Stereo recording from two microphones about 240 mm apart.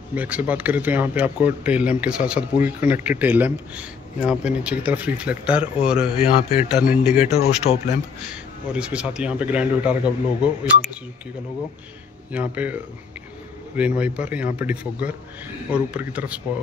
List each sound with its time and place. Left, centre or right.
0.1 s speech: centre
6.2 s a man's voice: left
6.7 s speech: centre
7.7 s speech: left
8.3 s speech: centre
12.3 s speech: centre